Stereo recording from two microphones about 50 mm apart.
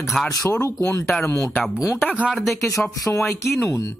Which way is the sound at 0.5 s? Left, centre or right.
Left.